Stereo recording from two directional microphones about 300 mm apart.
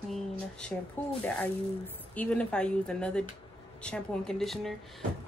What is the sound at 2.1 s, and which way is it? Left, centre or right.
Speech, centre.